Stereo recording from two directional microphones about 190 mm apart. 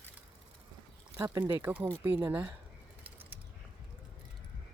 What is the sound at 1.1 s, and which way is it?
Speech, 15° right (ahead or behind).